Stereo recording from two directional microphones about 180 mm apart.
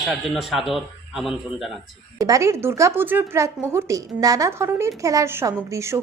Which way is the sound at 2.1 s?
20° right (ahead or behind).